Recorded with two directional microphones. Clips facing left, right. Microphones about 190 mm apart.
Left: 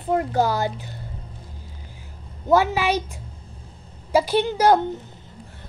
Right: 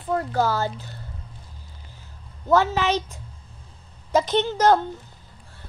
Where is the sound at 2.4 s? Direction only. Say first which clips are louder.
Left 1 dB; 15° left (ahead or behind).